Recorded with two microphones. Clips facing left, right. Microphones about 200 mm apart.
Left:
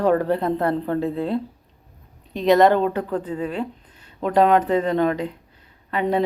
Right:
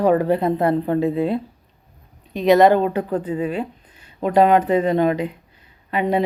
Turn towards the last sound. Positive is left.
turn(degrees=-10)  # may be behind; listen again after turning